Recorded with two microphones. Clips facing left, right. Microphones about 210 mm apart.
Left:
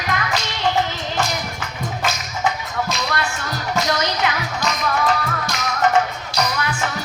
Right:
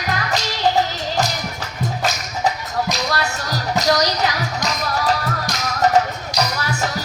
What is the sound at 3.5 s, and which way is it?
Music, 40° right (ahead or behind).